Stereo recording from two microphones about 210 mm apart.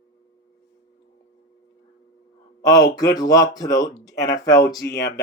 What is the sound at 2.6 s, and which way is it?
A man's voice, 15° left (ahead or behind).